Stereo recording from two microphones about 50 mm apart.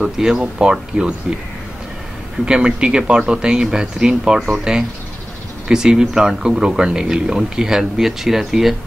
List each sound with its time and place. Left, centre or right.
0.0 s speech: centre
2.4 s speech: centre